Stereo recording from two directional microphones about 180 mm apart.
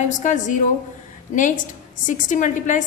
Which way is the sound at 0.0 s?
40° left (ahead or behind).